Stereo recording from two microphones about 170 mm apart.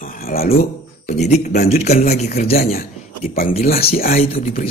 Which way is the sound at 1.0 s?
40° left (ahead or behind).